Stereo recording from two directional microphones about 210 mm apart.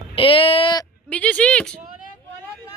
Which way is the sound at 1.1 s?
5° left (ahead or behind).